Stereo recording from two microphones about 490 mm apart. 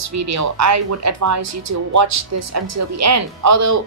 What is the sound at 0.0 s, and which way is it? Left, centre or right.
A woman's voice, right.